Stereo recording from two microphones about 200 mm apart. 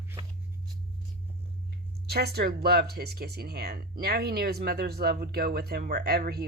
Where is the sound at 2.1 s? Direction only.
55° right (ahead or behind).